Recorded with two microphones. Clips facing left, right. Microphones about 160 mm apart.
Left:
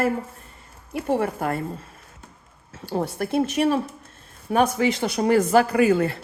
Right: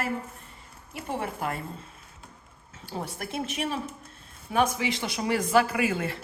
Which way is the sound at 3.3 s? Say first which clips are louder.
Left 11 dB; 45° left (ahead or behind).